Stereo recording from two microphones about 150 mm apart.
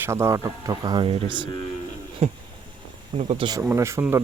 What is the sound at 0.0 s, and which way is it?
Speech, 20° right (ahead or behind).